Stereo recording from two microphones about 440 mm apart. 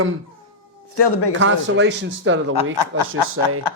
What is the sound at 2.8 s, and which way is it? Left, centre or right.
Speech, left.